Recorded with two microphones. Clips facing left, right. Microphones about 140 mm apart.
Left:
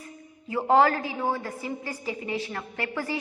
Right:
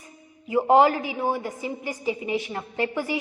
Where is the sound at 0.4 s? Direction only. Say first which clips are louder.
Right 3 dB; 15° right (ahead or behind).